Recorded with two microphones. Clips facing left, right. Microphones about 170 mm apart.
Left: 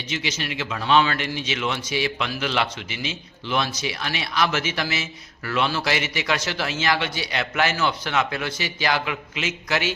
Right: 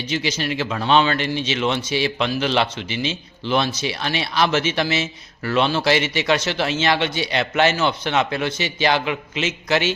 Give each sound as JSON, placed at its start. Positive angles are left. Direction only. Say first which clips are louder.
{"t": 0.1, "sound": "speech", "louder": "right 5 dB", "side_deg": -35}